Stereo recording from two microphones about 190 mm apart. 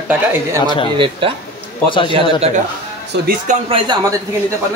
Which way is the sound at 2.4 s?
35° right (ahead or behind).